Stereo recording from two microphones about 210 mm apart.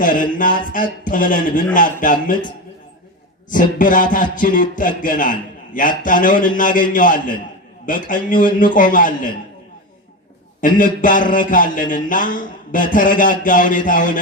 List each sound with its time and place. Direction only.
0.0 s a man's voice: 40° left (ahead or behind)
3.5 s a man's voice: 40° left (ahead or behind)
10.6 s a man's voice: 40° left (ahead or behind)